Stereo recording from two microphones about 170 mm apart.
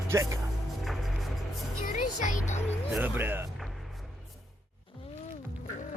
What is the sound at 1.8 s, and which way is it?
Music, 45° left (ahead or behind).